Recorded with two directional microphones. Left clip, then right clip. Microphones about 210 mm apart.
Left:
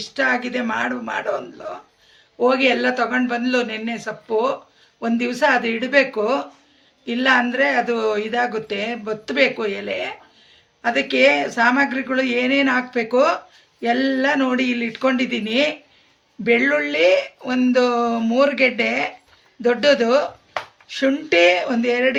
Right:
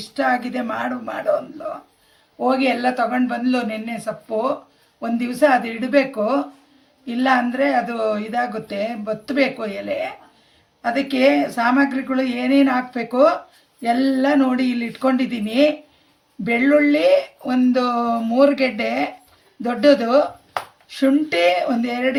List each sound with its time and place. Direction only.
0.0 s speech: 55° left (ahead or behind)
2.4 s speech: 55° left (ahead or behind)